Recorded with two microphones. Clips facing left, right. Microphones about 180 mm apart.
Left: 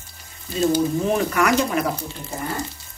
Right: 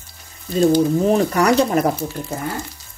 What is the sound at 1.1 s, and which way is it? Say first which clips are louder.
Speech: right 4 dB; 35° right (ahead or behind).